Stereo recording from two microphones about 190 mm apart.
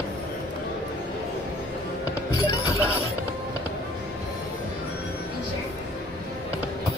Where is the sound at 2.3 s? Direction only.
20° left (ahead or behind).